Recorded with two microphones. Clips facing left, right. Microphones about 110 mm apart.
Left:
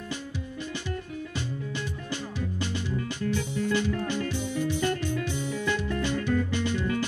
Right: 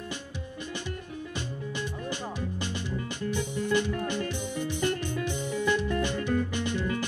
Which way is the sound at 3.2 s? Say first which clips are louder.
Left 1 dB; 15° right (ahead or behind).